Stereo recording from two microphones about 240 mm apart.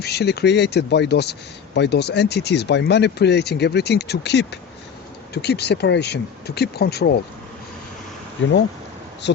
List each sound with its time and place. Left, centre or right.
0.0 s speech: left
8.4 s speech: left